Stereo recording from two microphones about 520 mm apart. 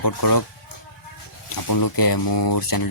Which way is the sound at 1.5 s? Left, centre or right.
Left.